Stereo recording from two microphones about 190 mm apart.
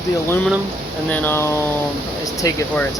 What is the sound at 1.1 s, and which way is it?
Speech, 10° left (ahead or behind).